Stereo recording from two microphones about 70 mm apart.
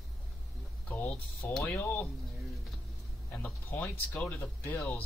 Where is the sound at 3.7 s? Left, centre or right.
Left.